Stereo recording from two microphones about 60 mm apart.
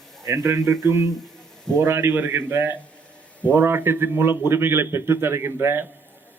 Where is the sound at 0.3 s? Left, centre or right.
Right.